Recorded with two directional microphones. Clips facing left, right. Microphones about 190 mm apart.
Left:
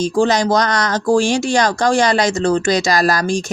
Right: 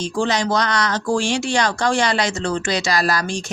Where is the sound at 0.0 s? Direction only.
40° left (ahead or behind).